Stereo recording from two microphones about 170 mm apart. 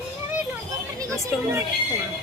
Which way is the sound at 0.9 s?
20° right (ahead or behind).